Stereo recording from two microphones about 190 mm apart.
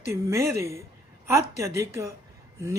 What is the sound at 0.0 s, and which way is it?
Speech, 15° right (ahead or behind).